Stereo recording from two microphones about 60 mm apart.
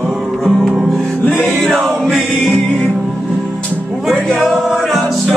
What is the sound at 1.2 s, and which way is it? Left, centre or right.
Music, left.